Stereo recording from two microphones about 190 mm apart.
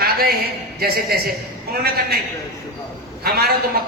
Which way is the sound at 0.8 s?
55° right (ahead or behind).